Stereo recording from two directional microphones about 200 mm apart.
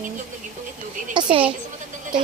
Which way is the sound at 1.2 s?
25° right (ahead or behind).